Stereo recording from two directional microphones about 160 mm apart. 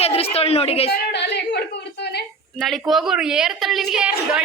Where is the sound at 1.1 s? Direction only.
90° left.